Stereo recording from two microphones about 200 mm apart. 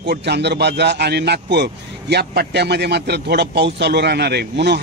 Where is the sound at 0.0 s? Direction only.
55° right (ahead or behind).